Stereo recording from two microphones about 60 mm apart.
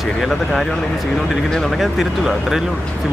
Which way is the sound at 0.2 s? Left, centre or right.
Centre.